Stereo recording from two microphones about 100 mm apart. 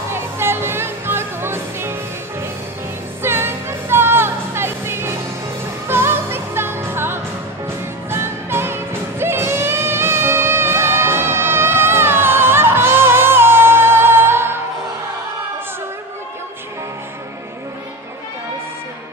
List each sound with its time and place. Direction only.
0.1 s music: 25° right (ahead or behind)
3.2 s music: 25° right (ahead or behind)